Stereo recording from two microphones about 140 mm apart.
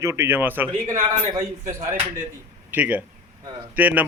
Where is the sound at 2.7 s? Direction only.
10° right (ahead or behind).